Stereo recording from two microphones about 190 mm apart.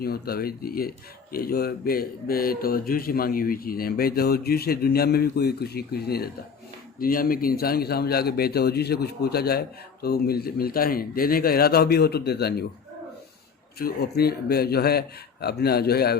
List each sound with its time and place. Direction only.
0.0 s speech: 55° left (ahead or behind)
13.7 s speech: 50° left (ahead or behind)